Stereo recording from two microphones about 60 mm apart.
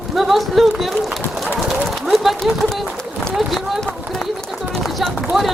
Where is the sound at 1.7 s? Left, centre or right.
Centre.